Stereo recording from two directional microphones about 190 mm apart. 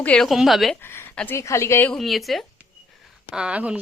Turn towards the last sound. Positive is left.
turn(degrees=-5)  # may be behind; listen again after turning